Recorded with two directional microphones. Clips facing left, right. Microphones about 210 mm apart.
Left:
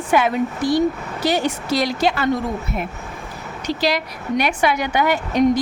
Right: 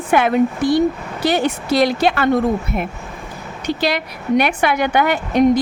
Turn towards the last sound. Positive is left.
turn(degrees=-55)  # may be behind; listen again after turning